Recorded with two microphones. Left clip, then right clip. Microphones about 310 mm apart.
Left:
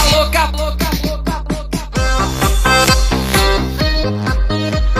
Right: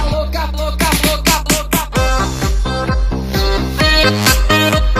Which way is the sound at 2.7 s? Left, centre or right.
Left.